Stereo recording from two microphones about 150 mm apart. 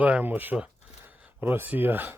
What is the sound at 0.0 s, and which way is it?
Speech, 10° right (ahead or behind).